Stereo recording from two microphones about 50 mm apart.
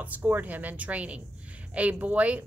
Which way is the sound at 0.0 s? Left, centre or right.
Right.